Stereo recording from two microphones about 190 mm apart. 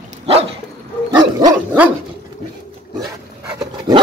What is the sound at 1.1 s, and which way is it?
Dog, 20° right (ahead or behind).